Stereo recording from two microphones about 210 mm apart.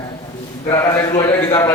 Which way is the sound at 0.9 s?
15° left (ahead or behind).